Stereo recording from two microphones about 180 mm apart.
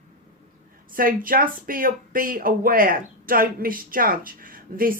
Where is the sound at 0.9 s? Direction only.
50° right (ahead or behind).